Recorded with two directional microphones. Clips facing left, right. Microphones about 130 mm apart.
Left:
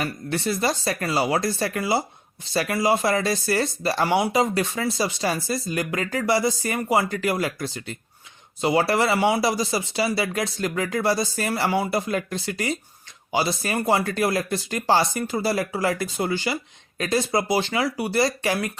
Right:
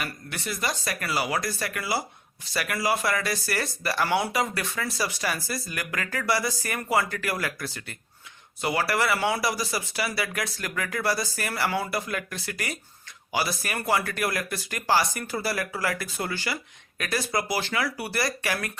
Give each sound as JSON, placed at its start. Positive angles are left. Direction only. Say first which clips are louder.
{"t": 0.0, "sound": "speech", "louder": "left 8 dB", "side_deg": 30}